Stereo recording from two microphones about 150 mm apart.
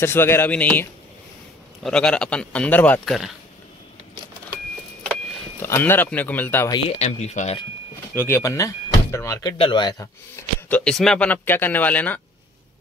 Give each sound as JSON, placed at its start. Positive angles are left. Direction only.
{"t": 0.0, "sound": "speech", "side_deg": 15}
{"t": 5.6, "sound": "speech", "side_deg": 15}
{"t": 7.0, "sound": "speech", "side_deg": 50}
{"t": 8.1, "sound": "speech", "side_deg": 15}
{"t": 10.3, "sound": "speech", "side_deg": 10}